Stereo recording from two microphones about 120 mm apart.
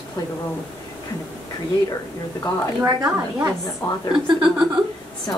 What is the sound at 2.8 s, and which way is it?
Speech, 35° right (ahead or behind).